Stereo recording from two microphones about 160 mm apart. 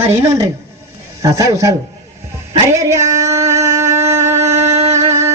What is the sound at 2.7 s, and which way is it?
Music, 15° right (ahead or behind).